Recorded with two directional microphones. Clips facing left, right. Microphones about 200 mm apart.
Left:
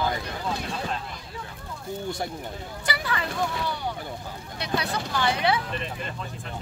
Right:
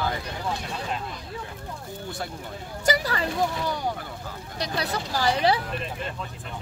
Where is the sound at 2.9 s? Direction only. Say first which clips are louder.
Right 5 dB; 40° right (ahead or behind).